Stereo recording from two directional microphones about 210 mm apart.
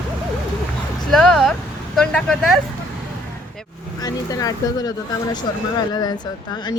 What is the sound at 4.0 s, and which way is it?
A woman's voice, 15° left (ahead or behind).